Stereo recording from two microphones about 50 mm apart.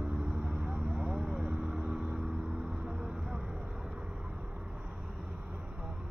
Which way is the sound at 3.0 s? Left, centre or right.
Centre.